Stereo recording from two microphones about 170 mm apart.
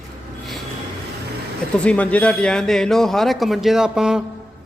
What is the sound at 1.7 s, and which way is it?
A man's voice, 5° left (ahead or behind).